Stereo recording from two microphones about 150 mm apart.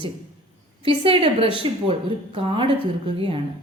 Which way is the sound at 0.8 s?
35° right (ahead or behind).